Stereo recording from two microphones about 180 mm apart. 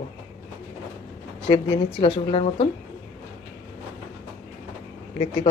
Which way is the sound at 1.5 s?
30° left (ahead or behind).